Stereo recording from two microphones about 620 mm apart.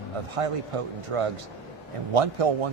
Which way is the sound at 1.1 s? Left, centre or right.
Right.